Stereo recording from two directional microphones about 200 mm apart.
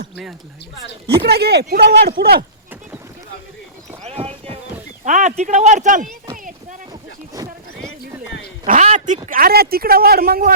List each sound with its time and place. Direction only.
1.2 s speech: 55° right (ahead or behind)
4.0 s a sound: 30° right (ahead or behind)
5.0 s speech: 40° right (ahead or behind)
6.3 s a sound: 40° right (ahead or behind)
8.6 s speech: 40° right (ahead or behind)
9.4 s speech: 50° right (ahead or behind)